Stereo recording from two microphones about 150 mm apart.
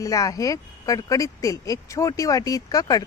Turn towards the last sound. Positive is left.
turn(degrees=25)  # may be behind; listen again after turning